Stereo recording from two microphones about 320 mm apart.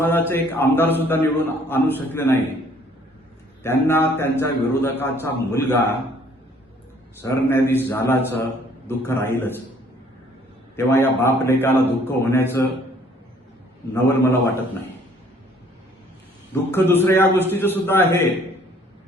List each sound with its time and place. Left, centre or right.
0.0 s a man's voice: centre
3.6 s a man's voice: centre
7.2 s a man's voice: centre
10.8 s a man's voice: centre
14.1 s a man's voice: centre
16.7 s a man's voice: centre